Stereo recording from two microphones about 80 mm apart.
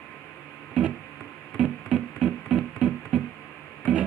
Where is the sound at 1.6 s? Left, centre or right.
Centre.